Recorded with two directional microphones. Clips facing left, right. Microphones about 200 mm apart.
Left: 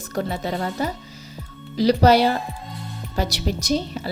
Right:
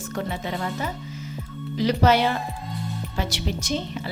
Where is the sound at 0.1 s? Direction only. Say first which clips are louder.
Left 4 dB; 40° left (ahead or behind).